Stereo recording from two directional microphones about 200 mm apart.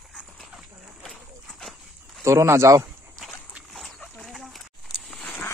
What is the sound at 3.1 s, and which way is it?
Dog, centre (ahead or behind).